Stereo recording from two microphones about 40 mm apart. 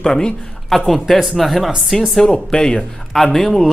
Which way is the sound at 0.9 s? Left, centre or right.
Centre.